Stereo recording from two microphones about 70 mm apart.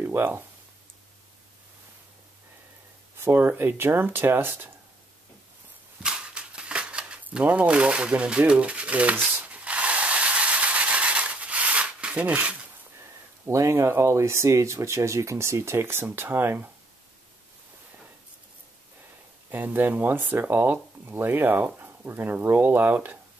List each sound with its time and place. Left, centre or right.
0.0 s speech: right
3.2 s speech: right
6.0 s a sound: centre
13.5 s speech: right
19.5 s speech: right